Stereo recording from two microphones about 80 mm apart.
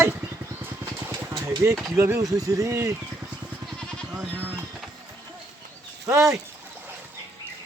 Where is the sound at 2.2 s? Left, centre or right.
Right.